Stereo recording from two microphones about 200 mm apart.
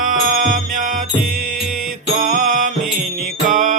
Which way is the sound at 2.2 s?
40° right (ahead or behind).